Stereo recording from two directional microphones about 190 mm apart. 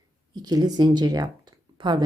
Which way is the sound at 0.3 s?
20° right (ahead or behind).